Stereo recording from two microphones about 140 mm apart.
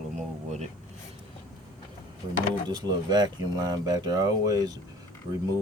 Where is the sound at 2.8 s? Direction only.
30° right (ahead or behind).